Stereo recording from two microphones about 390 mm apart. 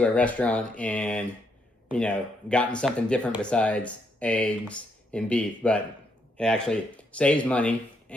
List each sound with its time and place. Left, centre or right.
0.0 s speech: centre